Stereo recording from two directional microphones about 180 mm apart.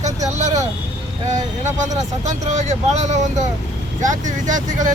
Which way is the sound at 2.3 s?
40° right (ahead or behind).